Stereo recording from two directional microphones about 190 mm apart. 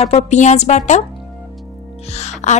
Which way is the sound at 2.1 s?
35° left (ahead or behind).